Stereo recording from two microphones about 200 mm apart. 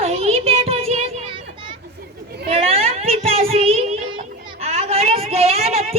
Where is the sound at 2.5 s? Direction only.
30° right (ahead or behind).